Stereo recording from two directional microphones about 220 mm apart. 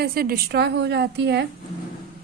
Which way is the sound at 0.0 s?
45° right (ahead or behind).